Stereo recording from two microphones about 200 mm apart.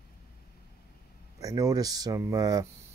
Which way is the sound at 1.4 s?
15° right (ahead or behind).